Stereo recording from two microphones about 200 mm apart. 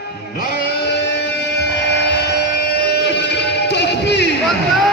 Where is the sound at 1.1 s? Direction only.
60° left (ahead or behind).